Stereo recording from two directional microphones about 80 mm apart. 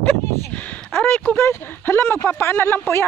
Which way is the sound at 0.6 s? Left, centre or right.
Left.